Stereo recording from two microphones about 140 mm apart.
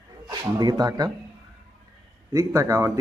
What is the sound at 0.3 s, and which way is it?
Speech, 30° right (ahead or behind).